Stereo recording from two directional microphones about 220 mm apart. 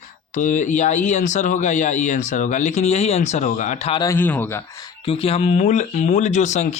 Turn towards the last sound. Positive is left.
turn(degrees=30)  # may be behind; listen again after turning